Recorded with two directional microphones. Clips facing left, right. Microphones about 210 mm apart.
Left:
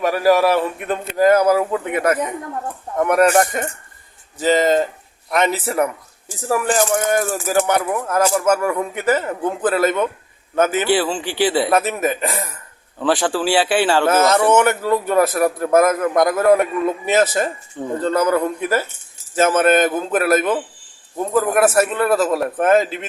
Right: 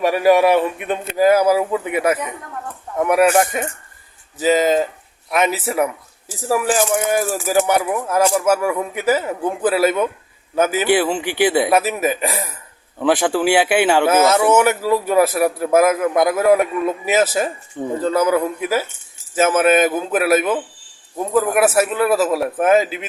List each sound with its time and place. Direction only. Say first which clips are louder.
0.3 s a man's voice: right 2 dB; centre (ahead or behind); by 11.7 s 20° right (ahead or behind)
11.7 s a man's voice: right 1 dB; 5° right (ahead or behind)